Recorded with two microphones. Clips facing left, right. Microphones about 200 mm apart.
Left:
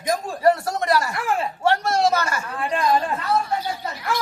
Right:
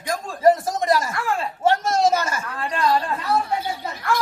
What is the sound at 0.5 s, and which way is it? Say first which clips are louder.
Speech: right 1 dB; 15° right (ahead or behind).